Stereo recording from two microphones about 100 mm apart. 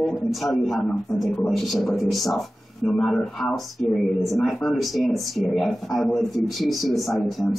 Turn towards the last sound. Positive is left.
turn(degrees=0)  # may be behind; listen again after turning